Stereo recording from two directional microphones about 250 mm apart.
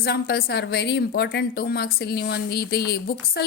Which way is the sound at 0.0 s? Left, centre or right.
Left.